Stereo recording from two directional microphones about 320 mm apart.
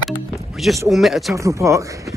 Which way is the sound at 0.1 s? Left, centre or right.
Centre.